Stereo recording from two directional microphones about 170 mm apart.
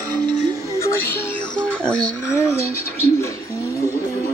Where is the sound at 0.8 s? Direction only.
15° left (ahead or behind).